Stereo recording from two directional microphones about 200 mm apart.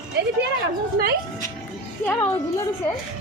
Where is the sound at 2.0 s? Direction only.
10° left (ahead or behind).